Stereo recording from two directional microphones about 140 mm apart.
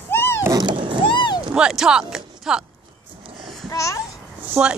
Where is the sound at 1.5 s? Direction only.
5° right (ahead or behind).